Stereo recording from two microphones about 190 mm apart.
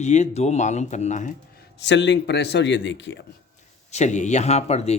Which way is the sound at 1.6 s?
70° left (ahead or behind).